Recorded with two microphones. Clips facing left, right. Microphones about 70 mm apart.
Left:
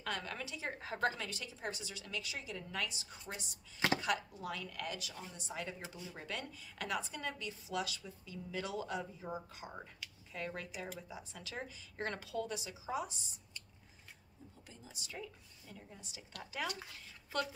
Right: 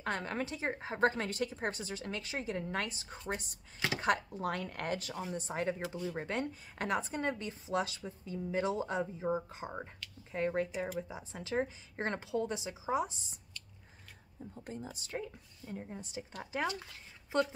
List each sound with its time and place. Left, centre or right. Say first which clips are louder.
0.0 s speech: right 6 dB; right
14.7 s speech: right 10 dB; right